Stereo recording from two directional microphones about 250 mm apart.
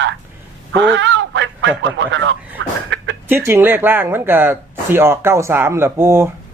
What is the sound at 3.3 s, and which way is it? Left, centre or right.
Speech, centre.